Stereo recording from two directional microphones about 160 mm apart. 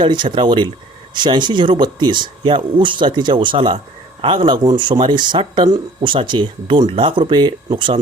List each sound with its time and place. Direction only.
0.0 s speech: 30° right (ahead or behind)